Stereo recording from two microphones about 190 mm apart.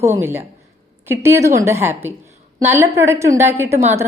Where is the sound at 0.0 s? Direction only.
15° right (ahead or behind).